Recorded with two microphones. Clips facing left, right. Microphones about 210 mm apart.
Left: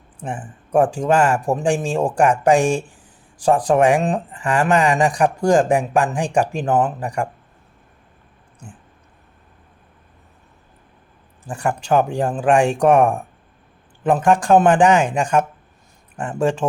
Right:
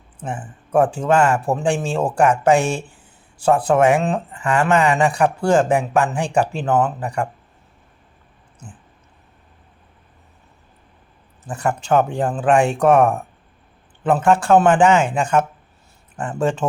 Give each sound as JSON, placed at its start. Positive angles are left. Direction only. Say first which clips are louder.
{"t": 0.2, "sound": "speech", "louder": "even", "side_deg": 15}
{"t": 4.3, "sound": "a sound", "louder": "even", "side_deg": 30}
{"t": 4.6, "sound": "speech", "louder": "even", "side_deg": 15}
{"t": 11.5, "sound": "speech", "louder": "even", "side_deg": 10}